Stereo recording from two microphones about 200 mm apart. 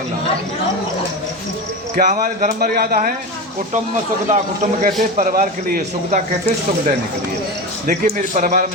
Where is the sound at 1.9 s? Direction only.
40° right (ahead or behind).